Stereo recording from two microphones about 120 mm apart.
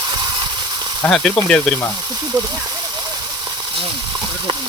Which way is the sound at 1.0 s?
5° left (ahead or behind).